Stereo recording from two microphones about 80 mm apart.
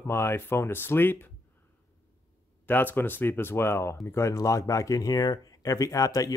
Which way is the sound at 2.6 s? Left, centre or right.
Left.